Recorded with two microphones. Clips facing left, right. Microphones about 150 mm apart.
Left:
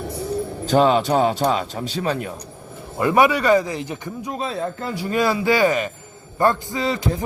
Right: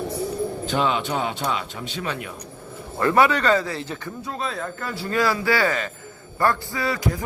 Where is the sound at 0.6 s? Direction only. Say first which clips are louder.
Left 9 dB; 40° left (ahead or behind).